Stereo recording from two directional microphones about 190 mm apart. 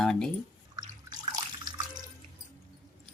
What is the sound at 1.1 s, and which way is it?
Water, 20° right (ahead or behind).